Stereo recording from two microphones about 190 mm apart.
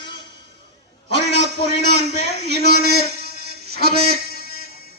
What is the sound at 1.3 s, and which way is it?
A man's voice, 60° right (ahead or behind).